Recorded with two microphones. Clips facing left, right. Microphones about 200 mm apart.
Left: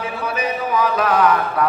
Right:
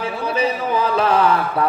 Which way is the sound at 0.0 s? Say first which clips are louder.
Right 3 dB; 30° right (ahead or behind).